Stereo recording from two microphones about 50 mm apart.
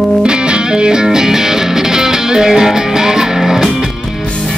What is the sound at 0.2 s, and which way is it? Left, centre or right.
Music, centre.